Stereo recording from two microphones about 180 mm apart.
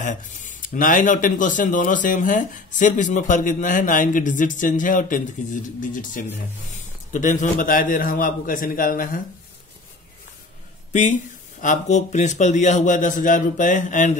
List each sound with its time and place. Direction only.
0.0 s a man's voice: 45° left (ahead or behind)
10.9 s speech: 45° left (ahead or behind)